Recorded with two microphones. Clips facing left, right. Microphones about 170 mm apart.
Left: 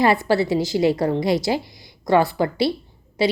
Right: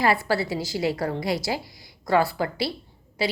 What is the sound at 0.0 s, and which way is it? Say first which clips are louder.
A woman's voice: left 5 dB; 20° left (ahead or behind).